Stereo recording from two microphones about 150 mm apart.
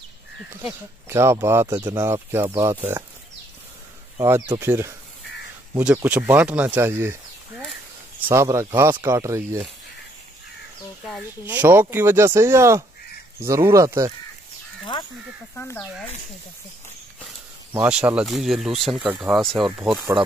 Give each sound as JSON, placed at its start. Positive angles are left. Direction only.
{"t": 1.0, "sound": "speech", "side_deg": -20}
{"t": 4.2, "sound": "speech", "side_deg": -20}
{"t": 11.4, "sound": "speech", "side_deg": -10}
{"t": 15.5, "sound": "speech", "side_deg": 15}
{"t": 17.7, "sound": "speech", "side_deg": -10}